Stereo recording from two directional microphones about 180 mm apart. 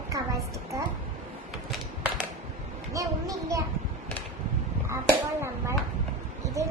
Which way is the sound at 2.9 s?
20° right (ahead or behind).